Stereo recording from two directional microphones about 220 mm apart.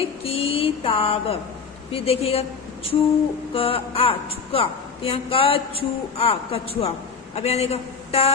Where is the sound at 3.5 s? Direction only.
25° left (ahead or behind).